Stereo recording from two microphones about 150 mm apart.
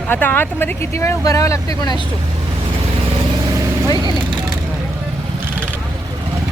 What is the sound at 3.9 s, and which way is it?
Speech, 30° right (ahead or behind).